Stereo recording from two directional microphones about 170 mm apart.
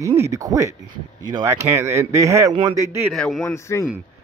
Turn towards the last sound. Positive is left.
turn(degrees=15)  # may be behind; listen again after turning